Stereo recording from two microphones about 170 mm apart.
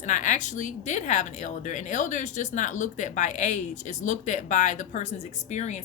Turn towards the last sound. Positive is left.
turn(degrees=45)  # may be behind; listen again after turning